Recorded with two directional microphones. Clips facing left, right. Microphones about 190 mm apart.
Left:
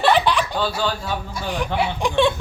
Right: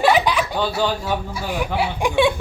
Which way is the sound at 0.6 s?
15° right (ahead or behind).